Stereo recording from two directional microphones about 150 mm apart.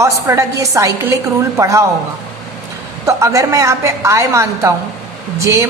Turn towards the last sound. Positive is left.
turn(degrees=-20)  # may be behind; listen again after turning